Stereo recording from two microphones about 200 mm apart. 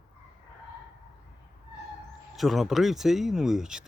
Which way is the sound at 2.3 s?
Centre (ahead or behind).